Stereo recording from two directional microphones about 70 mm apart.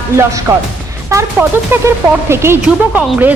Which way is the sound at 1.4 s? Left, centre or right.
Right.